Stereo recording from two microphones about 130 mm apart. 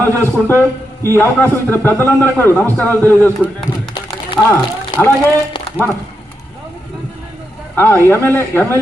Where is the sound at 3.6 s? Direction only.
35° left (ahead or behind).